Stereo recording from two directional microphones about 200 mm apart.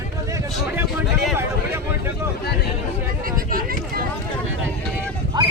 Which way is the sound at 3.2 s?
45° right (ahead or behind).